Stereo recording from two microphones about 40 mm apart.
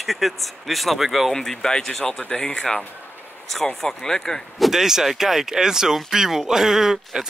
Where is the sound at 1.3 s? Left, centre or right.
Centre.